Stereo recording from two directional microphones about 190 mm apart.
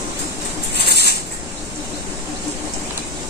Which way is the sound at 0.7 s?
60° left (ahead or behind).